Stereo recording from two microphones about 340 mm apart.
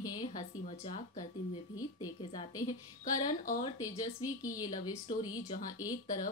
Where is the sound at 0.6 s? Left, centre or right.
Left.